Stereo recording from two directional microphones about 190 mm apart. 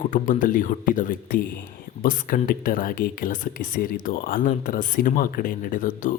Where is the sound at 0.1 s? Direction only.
45° left (ahead or behind).